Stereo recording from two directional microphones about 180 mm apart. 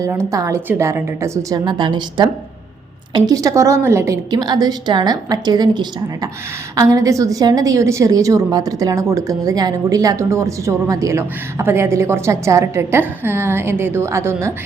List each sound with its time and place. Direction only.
0.3 s a woman's voice: 15° right (ahead or behind)